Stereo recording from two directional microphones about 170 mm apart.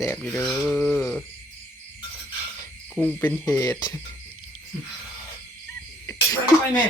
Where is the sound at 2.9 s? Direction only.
10° left (ahead or behind).